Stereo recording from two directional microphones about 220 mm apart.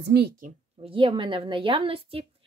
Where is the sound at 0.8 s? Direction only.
25° right (ahead or behind).